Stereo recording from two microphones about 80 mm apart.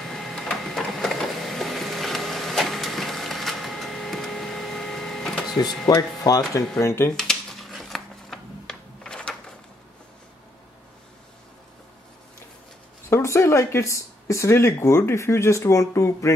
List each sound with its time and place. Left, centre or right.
0.0 s printer: centre
5.9 s speech: left
6.8 s speech: left
7.2 s a sound: centre
13.1 s speech: left